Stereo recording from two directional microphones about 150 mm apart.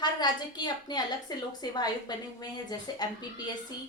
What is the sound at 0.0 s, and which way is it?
A woman's voice, 30° left (ahead or behind).